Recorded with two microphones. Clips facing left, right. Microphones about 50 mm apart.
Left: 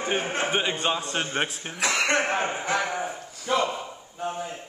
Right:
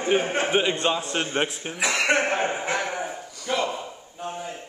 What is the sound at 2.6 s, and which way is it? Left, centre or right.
Speech, centre.